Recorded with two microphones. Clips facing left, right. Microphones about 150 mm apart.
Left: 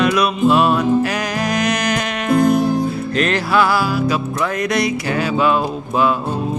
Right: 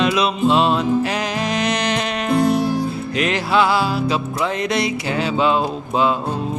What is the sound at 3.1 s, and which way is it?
Music, 15° right (ahead or behind).